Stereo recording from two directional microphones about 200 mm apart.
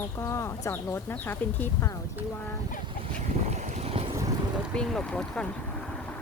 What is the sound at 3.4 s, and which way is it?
Boat, 35° right (ahead or behind).